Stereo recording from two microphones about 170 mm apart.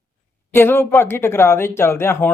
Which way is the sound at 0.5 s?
15° left (ahead or behind).